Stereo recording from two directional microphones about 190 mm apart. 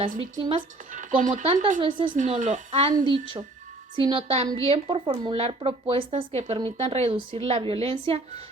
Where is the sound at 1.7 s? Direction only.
25° right (ahead or behind).